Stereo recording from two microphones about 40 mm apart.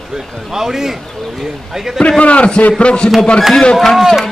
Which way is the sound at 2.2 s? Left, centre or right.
Left.